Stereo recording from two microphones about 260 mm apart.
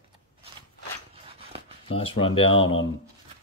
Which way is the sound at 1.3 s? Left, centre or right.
Right.